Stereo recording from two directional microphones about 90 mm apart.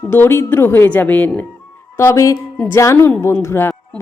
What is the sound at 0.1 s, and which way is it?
A man's voice, 25° left (ahead or behind).